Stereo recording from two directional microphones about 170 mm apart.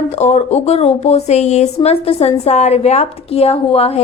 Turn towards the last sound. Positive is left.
turn(degrees=35)  # may be behind; listen again after turning